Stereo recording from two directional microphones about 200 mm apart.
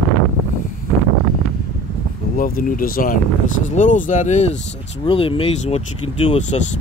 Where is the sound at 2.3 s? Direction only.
45° left (ahead or behind).